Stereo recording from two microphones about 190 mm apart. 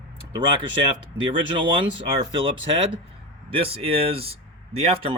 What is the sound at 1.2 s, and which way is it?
Speech, 25° right (ahead or behind).